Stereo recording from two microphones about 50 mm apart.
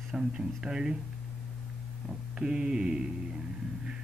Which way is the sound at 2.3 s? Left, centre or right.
Centre.